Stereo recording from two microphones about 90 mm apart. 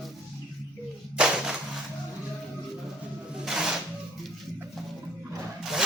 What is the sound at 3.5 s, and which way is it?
Filing, 5° right (ahead or behind).